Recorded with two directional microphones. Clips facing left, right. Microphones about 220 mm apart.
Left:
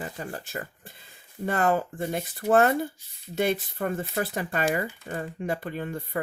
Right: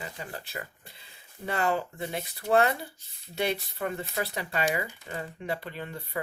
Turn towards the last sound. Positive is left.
turn(degrees=50)  # may be behind; listen again after turning